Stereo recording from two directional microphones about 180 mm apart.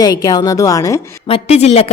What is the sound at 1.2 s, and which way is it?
Speech, 35° left (ahead or behind).